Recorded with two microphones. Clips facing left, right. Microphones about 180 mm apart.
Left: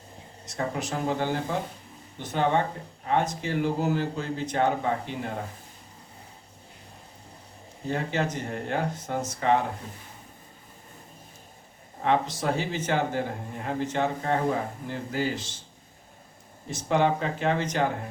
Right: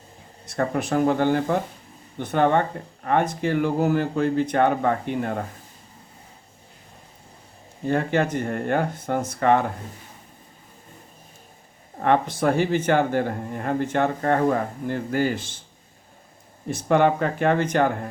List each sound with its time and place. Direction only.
0.4 s speech: 60° right (ahead or behind)
7.9 s speech: 60° right (ahead or behind)
12.0 s speech: 55° right (ahead or behind)
16.6 s speech: 55° right (ahead or behind)